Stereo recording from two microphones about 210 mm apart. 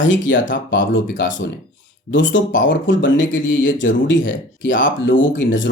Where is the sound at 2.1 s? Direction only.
65° left (ahead or behind).